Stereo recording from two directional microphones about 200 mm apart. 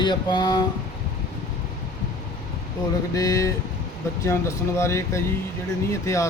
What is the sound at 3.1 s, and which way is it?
Speech, 15° left (ahead or behind).